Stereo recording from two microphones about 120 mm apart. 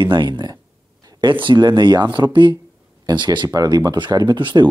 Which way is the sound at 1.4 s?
40° right (ahead or behind).